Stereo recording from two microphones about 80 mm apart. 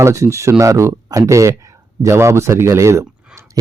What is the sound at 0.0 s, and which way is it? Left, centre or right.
A man's voice, right.